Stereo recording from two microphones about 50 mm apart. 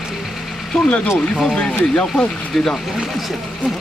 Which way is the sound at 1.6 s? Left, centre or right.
Centre.